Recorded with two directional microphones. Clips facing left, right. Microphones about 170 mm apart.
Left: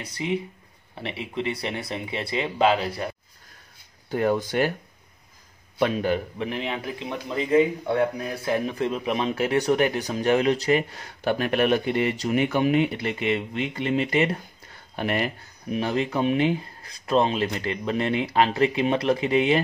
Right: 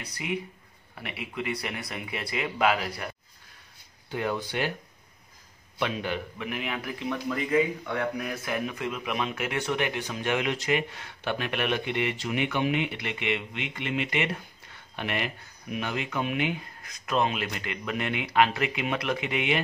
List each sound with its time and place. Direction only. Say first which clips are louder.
0.0 s speech: left 5 dB; 25° left (ahead or behind)
4.1 s speech: left 7 dB; 45° left (ahead or behind)
5.8 s speech: left 7 dB; 40° left (ahead or behind)